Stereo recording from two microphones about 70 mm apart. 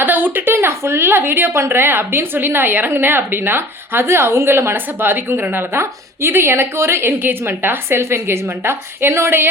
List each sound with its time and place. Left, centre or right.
0.0 s speech: right